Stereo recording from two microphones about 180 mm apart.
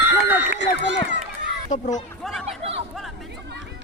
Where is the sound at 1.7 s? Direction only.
40° left (ahead or behind).